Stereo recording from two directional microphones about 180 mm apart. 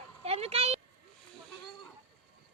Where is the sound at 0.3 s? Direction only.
35° right (ahead or behind).